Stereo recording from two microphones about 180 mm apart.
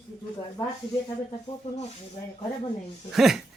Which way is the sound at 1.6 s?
35° left (ahead or behind).